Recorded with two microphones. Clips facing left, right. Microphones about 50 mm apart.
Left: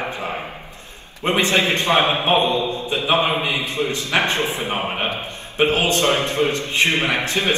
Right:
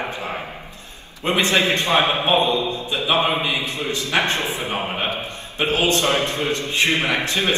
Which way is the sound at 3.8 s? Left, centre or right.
Right.